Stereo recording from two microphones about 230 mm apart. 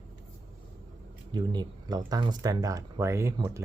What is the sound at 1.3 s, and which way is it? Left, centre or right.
Speech, centre.